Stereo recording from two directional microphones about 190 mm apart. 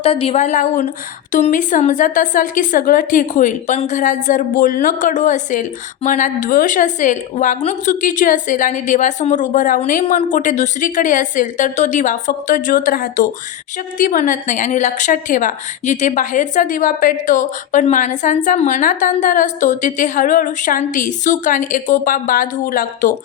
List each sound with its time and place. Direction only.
0.0 s a woman's voice: 30° left (ahead or behind)